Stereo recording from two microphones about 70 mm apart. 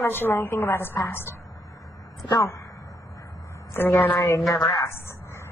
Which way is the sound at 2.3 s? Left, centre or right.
Left.